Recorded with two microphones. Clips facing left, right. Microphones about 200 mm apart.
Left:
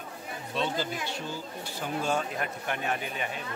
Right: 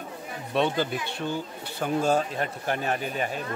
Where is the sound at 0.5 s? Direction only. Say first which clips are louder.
Right 6 dB; 60° right (ahead or behind).